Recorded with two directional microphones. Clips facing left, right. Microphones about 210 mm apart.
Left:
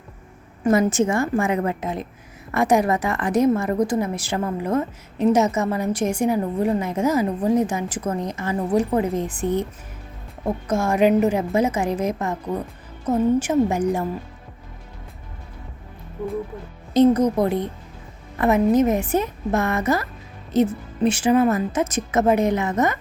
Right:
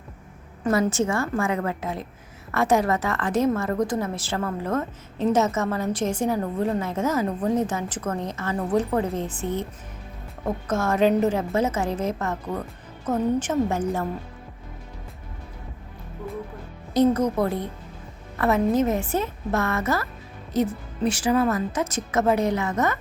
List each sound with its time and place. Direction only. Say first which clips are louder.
0.6 s a woman's voice: left 4 dB; 20° left (ahead or behind)
10.7 s a woman's voice: left 3 dB; 10° left (ahead or behind)
16.9 s a woman's voice: left 4 dB; 20° left (ahead or behind)